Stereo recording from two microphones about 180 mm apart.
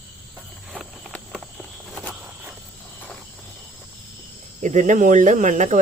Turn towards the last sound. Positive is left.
turn(degrees=-45)  # may be behind; listen again after turning